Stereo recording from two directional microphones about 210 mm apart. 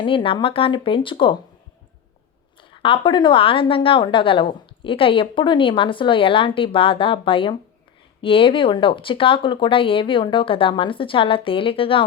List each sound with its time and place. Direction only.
0.0 s a woman's voice: 25° left (ahead or behind)
2.8 s a woman's voice: 25° left (ahead or behind)